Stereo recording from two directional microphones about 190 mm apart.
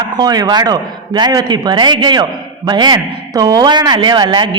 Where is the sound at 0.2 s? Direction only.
20° right (ahead or behind).